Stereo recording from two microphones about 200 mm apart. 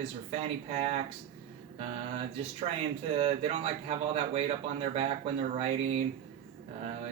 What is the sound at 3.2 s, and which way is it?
A man's voice, 35° right (ahead or behind).